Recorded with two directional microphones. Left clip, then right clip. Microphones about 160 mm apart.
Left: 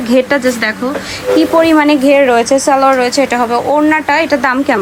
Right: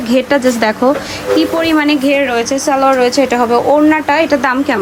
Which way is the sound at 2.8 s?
20° right (ahead or behind).